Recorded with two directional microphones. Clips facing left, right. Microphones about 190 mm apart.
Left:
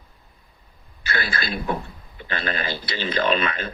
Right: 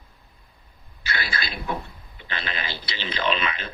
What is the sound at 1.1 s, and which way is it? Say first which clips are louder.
Speech: left 4 dB; 50° left (ahead or behind).